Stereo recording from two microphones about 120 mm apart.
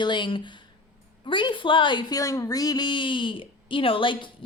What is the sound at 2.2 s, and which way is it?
A woman's voice, 30° left (ahead or behind).